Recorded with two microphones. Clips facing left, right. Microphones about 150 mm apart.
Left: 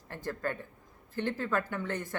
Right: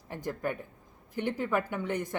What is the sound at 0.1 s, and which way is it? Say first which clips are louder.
Speech: right 2 dB; 15° right (ahead or behind).